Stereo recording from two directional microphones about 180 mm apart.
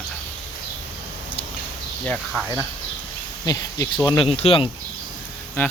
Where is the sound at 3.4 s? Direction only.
20° left (ahead or behind).